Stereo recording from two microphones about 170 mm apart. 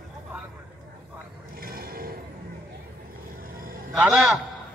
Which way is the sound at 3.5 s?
55° right (ahead or behind).